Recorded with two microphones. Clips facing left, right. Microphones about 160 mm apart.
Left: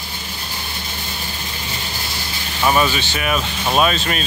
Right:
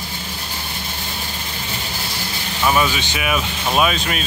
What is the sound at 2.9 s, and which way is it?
Speech, 15° right (ahead or behind).